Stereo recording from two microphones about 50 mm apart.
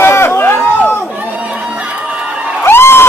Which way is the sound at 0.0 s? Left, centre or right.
Left.